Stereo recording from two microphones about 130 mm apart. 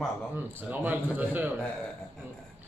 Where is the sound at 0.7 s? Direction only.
15° right (ahead or behind).